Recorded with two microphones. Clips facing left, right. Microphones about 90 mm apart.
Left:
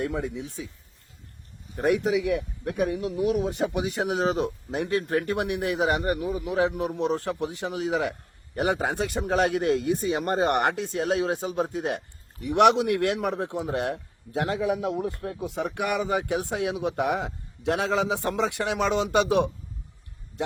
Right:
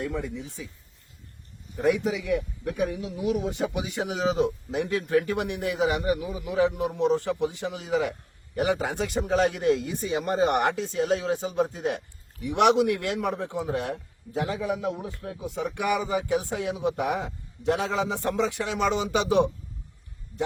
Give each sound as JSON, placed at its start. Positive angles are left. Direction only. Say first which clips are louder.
{"t": 0.0, "sound": "speech", "louder": "left 2 dB", "side_deg": 55}
{"t": 1.7, "sound": "speech", "louder": "left 1 dB", "side_deg": 50}
{"t": 14.8, "sound": "a man's voice", "louder": "left 3 dB", "side_deg": 50}